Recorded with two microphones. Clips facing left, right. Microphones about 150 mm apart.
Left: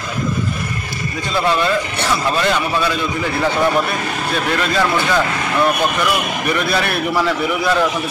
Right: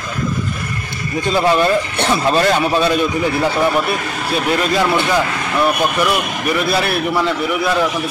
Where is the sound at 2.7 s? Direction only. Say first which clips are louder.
Right 4 dB; 25° right (ahead or behind).